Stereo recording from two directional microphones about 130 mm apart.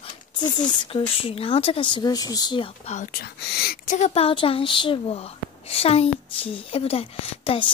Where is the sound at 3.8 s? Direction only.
60° left (ahead or behind).